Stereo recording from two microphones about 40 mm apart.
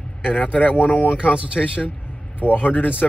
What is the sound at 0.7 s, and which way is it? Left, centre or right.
Speech, left.